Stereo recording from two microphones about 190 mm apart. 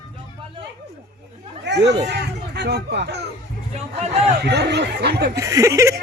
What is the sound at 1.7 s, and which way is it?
Speech, 65° right (ahead or behind).